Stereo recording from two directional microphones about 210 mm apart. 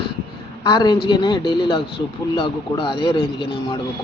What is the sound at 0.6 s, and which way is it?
A man's voice, 20° left (ahead or behind).